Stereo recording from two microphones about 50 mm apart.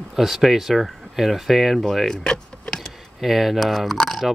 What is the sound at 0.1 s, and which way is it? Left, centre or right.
Speech, centre.